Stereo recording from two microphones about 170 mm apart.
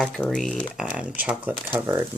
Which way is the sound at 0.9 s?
10° right (ahead or behind).